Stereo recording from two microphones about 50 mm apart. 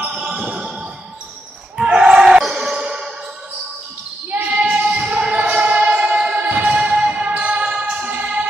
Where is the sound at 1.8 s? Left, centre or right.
Centre.